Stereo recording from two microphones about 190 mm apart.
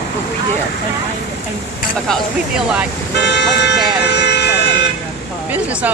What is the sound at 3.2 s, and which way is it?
Speech, 65° left (ahead or behind).